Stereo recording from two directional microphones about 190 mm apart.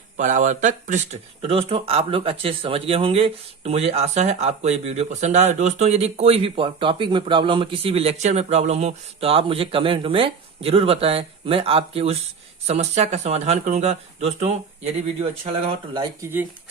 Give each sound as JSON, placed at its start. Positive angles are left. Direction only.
{"t": 0.2, "sound": "speech", "side_deg": -40}
{"t": 16.2, "sound": "speech", "side_deg": -15}